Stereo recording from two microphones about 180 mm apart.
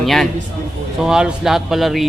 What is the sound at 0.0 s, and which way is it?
A man's voice, centre (ahead or behind).